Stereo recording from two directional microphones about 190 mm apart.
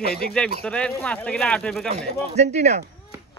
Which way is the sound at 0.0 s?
55° left (ahead or behind).